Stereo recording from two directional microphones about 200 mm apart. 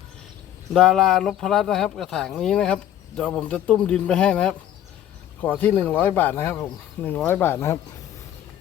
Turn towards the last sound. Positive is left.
turn(degrees=15)  # may be behind; listen again after turning